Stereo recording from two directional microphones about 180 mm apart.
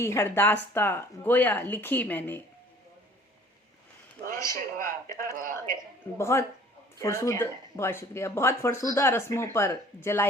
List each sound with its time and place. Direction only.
0.0 s speech: 15° left (ahead or behind)
4.8 s a sound: 50° right (ahead or behind)
5.3 s speech: 50° right (ahead or behind)
6.1 s speech: 15° left (ahead or behind)